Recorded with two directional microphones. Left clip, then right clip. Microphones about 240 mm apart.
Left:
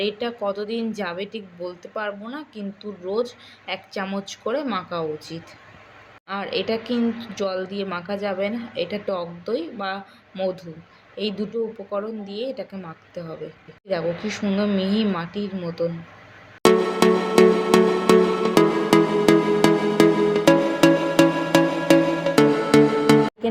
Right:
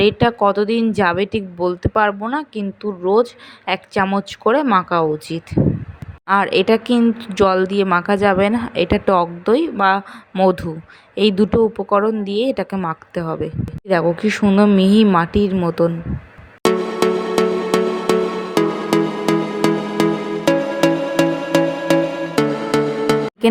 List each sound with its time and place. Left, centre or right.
0.0 s speech: right
3.7 s a woman's voice: right
16.6 s music: centre